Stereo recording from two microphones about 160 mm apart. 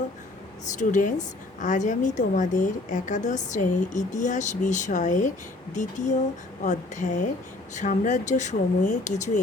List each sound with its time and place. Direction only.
0.8 s a woman's voice: 50° left (ahead or behind)